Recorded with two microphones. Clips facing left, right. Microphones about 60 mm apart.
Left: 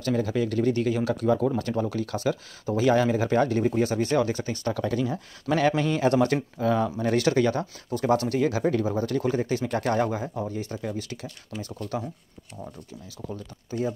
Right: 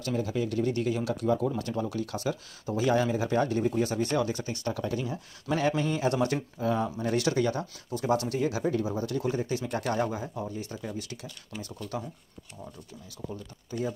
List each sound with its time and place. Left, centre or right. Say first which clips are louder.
0.0 s speech: left 4 dB; left
0.8 s speech: left 4 dB; left
3.8 s speech: left 4 dB; left
4.5 s speech: left 4 dB; left
6.6 s speech: left 4 dB; left
10.9 s speech: left 5 dB; left